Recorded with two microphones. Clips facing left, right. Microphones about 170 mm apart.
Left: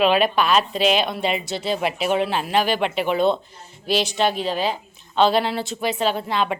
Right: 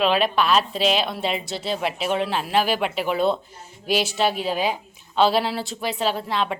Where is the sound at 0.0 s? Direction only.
Centre (ahead or behind).